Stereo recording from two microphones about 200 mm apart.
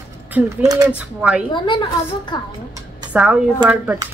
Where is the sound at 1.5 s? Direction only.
25° left (ahead or behind).